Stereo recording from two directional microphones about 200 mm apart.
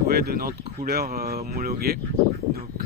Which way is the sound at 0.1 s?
50° right (ahead or behind).